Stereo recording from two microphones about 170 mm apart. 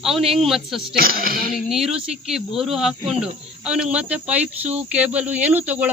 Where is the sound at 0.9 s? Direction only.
60° right (ahead or behind).